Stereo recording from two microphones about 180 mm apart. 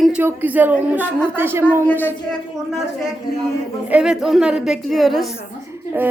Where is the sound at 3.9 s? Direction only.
5° right (ahead or behind).